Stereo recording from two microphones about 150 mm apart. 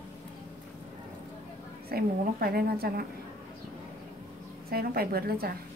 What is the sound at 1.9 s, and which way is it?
A woman's voice, 90° right.